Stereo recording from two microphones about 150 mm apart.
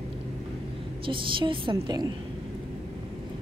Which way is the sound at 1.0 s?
35° right (ahead or behind).